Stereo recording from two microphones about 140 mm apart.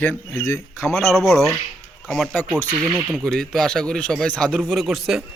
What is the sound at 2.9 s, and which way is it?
A man's voice, centre (ahead or behind).